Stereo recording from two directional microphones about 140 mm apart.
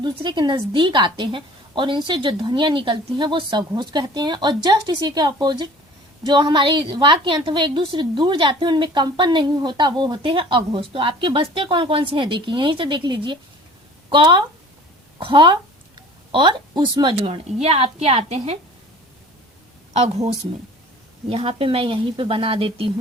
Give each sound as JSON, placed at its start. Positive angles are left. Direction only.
{"t": 0.0, "sound": "a woman's voice", "side_deg": -35}
{"t": 19.9, "sound": "a woman's voice", "side_deg": -50}
{"t": 21.2, "sound": "a woman's voice", "side_deg": -40}